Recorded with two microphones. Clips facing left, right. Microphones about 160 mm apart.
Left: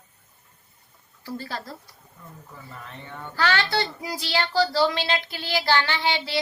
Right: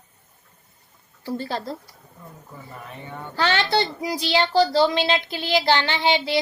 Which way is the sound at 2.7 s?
10° right (ahead or behind).